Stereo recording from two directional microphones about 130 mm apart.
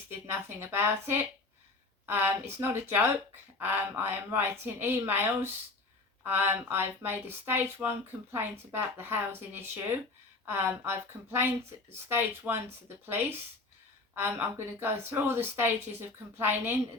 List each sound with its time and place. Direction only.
0.1 s speech: 20° right (ahead or behind)